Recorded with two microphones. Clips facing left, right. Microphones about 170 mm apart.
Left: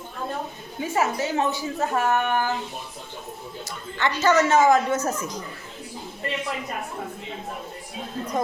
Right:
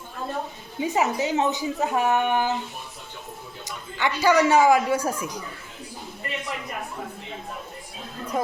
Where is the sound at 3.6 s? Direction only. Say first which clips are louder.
Even; 10° right (ahead or behind).